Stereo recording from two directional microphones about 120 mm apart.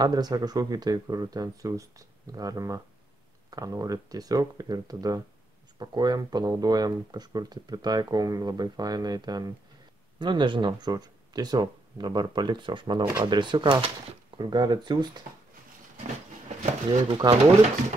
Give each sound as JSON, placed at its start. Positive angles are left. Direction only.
{"t": 0.0, "sound": "speech", "side_deg": -35}
{"t": 14.4, "sound": "speech", "side_deg": -35}
{"t": 17.1, "sound": "speech", "side_deg": -45}